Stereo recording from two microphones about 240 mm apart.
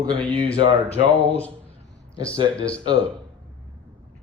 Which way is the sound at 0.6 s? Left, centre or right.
Centre.